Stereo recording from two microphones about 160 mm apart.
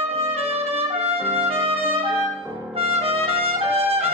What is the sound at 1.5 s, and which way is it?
Music, 40° right (ahead or behind).